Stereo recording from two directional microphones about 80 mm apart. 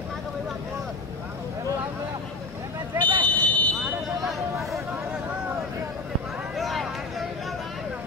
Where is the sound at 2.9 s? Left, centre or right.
Right.